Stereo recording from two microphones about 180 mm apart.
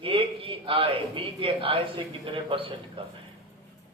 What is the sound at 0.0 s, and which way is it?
A man's voice, 30° right (ahead or behind).